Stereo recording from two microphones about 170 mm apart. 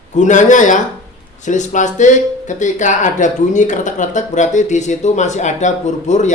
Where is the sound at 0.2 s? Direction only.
45° left (ahead or behind).